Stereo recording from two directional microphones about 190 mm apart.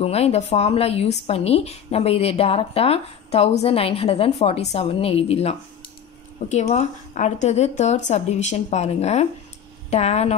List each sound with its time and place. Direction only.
0.0 s a woman's voice: 35° left (ahead or behind)